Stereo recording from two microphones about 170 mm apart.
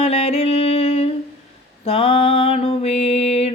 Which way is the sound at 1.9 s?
30° left (ahead or behind).